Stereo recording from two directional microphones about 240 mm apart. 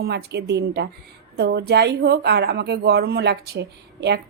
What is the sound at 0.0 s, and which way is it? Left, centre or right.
Speech, right.